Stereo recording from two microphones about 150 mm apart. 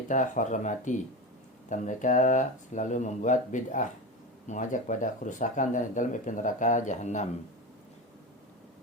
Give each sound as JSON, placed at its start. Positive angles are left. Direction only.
{"t": 0.1, "sound": "speech", "side_deg": 55}